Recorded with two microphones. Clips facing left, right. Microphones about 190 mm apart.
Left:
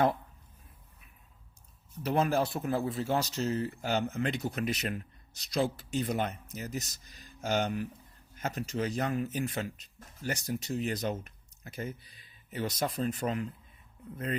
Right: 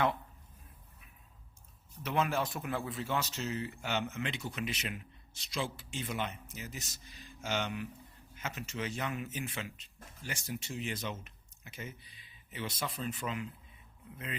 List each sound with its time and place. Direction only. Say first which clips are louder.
2.0 s speech: left 5 dB; 35° left (ahead or behind)